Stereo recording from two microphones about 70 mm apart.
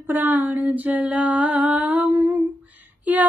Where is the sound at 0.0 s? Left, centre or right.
Right.